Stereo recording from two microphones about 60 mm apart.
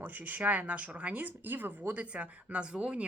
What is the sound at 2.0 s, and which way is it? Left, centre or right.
A woman's voice, right.